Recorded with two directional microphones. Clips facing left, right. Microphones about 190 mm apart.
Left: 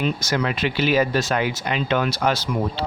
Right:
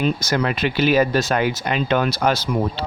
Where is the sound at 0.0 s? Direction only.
45° right (ahead or behind).